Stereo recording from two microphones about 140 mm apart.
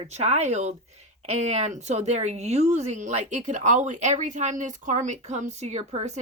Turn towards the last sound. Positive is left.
turn(degrees=-55)  # may be behind; listen again after turning